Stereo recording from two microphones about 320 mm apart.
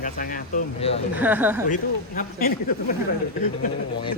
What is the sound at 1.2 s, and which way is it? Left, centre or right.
Speech, centre.